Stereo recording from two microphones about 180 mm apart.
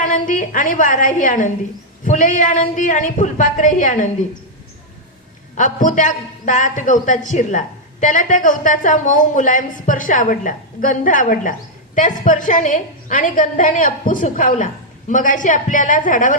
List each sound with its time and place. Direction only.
0.0 s a woman's voice: 45° left (ahead or behind)
5.5 s a woman's voice: 45° left (ahead or behind)